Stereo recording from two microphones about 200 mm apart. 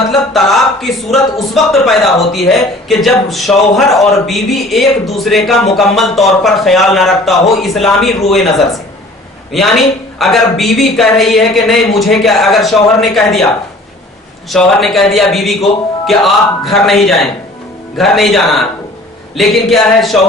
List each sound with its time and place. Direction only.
0.1 s a woman's voice: centre (ahead or behind)
9.5 s a woman's voice: centre (ahead or behind)
14.5 s a woman's voice: centre (ahead or behind)